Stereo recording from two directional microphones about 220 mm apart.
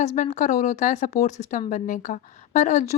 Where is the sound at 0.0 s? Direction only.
30° left (ahead or behind).